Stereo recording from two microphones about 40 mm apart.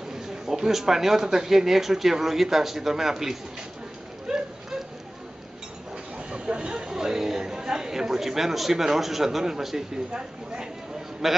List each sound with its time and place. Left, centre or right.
0.1 s speech: centre
6.1 s speech: right
10.1 s speech: right
11.2 s speech: centre